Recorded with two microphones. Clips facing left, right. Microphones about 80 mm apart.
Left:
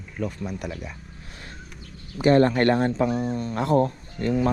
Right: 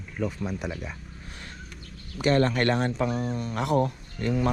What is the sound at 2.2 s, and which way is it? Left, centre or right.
Speech, left.